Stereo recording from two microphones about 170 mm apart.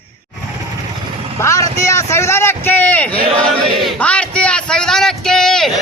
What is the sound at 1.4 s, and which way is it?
Vehicle, 15° left (ahead or behind).